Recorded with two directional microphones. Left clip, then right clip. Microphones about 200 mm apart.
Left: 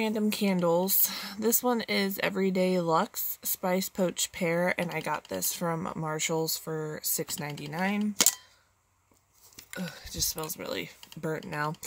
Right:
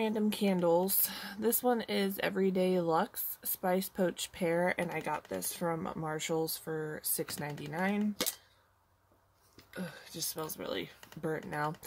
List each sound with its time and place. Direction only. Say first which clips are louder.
0.0 s speech: left 3 dB; 40° left (ahead or behind)
9.8 s speech: left 7 dB; 45° left (ahead or behind)